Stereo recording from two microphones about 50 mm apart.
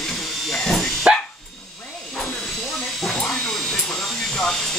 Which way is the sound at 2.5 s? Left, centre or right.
Centre.